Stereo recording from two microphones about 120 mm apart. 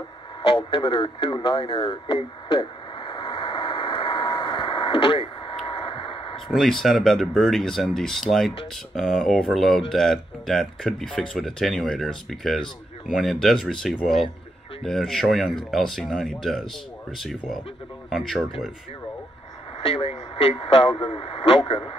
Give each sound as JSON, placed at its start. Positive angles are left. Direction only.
{"t": 0.4, "sound": "radio", "side_deg": 45}
{"t": 6.5, "sound": "speech", "side_deg": 0}
{"t": 18.1, "sound": "speech", "side_deg": 0}
{"t": 19.8, "sound": "speech", "side_deg": 55}